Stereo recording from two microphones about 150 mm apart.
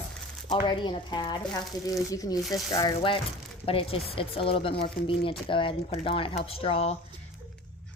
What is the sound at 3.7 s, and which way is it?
Speech, 40° left (ahead or behind).